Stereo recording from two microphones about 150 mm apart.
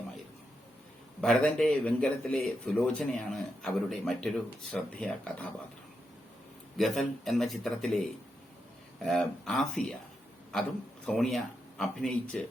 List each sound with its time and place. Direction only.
1.2 s speech: 5° left (ahead or behind)
6.7 s speech: centre (ahead or behind)